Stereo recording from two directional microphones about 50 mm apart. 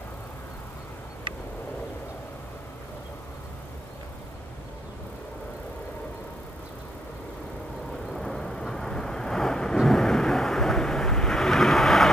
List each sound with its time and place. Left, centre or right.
8.1 s vehicle: centre